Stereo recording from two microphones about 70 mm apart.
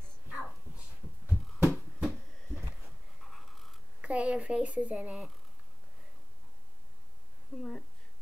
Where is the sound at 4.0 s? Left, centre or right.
Centre.